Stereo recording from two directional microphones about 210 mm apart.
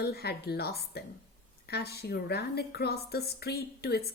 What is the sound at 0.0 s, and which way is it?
Speech, 50° left (ahead or behind).